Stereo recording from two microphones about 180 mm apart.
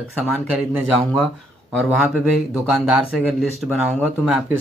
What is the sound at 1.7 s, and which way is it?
A man's voice, centre (ahead or behind).